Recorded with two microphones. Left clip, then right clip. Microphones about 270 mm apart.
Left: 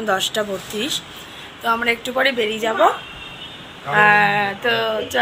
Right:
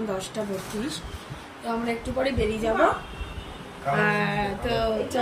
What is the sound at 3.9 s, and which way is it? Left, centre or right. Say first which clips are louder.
Speech: left 12 dB; centre.